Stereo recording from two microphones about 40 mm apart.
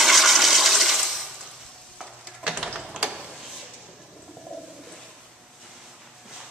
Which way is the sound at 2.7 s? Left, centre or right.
Right.